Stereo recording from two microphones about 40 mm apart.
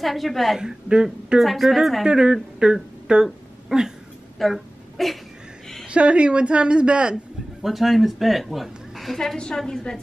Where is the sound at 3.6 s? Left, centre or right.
Centre.